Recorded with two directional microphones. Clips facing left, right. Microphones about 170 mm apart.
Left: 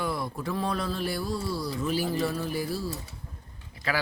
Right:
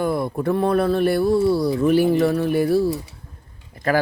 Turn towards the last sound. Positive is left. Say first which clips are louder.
# right 10 dB
turn(degrees=-50)  # may be behind; listen again after turning